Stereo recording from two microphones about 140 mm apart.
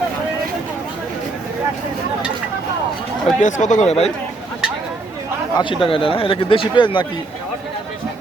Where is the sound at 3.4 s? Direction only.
60° left (ahead or behind).